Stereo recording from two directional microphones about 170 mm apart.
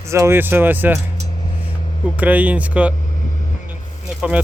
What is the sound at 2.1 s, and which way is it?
Speech, 10° right (ahead or behind).